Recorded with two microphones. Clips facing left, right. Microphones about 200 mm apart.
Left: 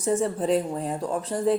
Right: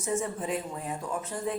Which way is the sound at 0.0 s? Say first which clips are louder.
Left 7 dB; 35° left (ahead or behind).